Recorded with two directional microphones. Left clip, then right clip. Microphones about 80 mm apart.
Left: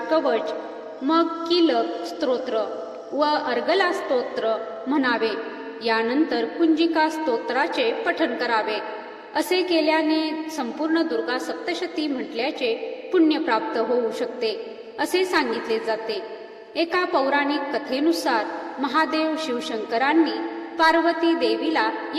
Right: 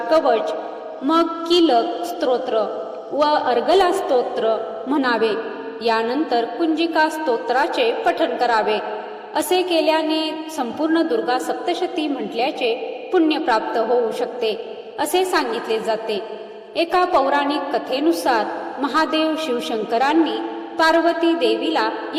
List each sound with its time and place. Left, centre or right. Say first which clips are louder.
0.1 s a woman's voice: right 5 dB; right